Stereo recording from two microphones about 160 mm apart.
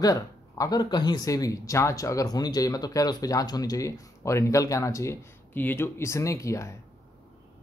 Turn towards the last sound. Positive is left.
turn(degrees=20)  # may be behind; listen again after turning